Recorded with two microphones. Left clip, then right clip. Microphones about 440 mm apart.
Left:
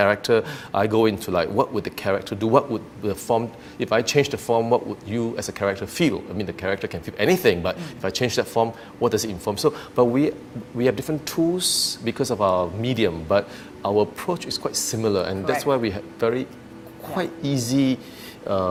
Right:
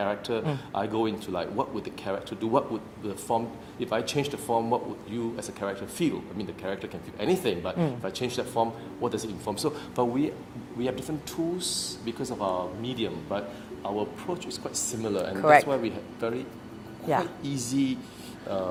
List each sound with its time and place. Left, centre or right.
0.0 s speech: left